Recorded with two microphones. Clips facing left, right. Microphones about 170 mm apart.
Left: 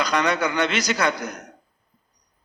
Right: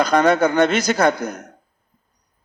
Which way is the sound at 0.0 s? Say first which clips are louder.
Right 7 dB; 50° right (ahead or behind).